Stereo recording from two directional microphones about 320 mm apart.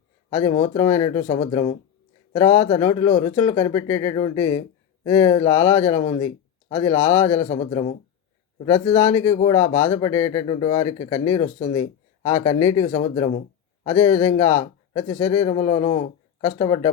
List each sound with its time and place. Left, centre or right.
0.3 s a man's voice: centre